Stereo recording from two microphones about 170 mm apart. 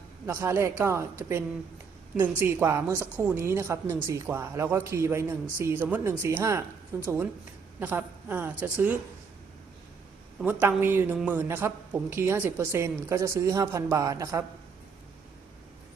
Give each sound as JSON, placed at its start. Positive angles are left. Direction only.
{"t": 0.3, "sound": "a woman's voice", "side_deg": -15}
{"t": 2.1, "sound": "a woman's voice", "side_deg": -15}
{"t": 10.4, "sound": "a woman's voice", "side_deg": -10}